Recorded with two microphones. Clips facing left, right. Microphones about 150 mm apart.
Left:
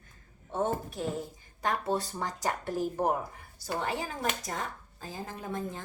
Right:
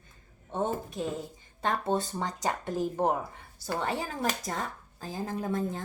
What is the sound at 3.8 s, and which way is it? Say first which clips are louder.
Speech: right 2 dB; 35° right (ahead or behind).